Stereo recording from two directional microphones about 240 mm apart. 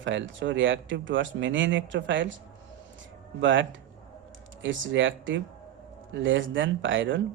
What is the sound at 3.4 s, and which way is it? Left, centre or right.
Speech, right.